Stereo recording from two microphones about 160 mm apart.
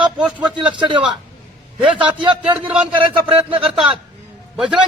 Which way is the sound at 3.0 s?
35° right (ahead or behind).